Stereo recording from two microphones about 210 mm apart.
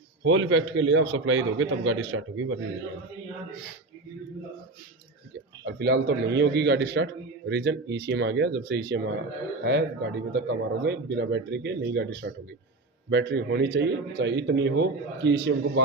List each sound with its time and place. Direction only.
0.3 s a man's voice: 65° right (ahead or behind)
5.6 s a man's voice: 55° right (ahead or behind)